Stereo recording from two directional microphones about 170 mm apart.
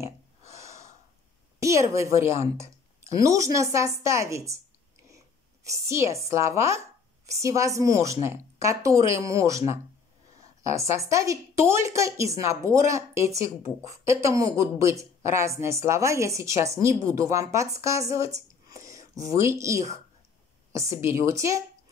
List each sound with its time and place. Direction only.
0.5 s gasp: 15° right (ahead or behind)
1.6 s a woman's voice: 15° right (ahead or behind)
18.7 s a sound: 20° right (ahead or behind)
19.2 s speech: 20° right (ahead or behind)